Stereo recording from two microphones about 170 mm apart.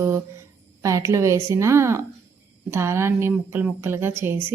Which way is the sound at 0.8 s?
20° right (ahead or behind).